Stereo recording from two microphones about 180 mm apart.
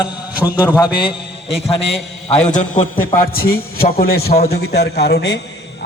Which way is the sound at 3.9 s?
60° left (ahead or behind).